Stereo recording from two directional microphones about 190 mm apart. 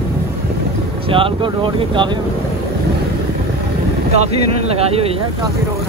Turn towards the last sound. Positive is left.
turn(degrees=-30)  # may be behind; listen again after turning